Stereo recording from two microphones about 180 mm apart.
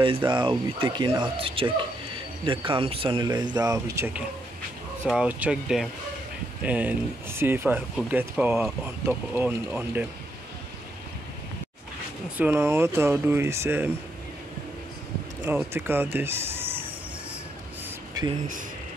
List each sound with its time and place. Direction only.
0.0 s speech: 25° right (ahead or behind); by 10.0 s 10° right (ahead or behind)
12.4 s speech: 10° right (ahead or behind)
15.4 s speech: 15° right (ahead or behind)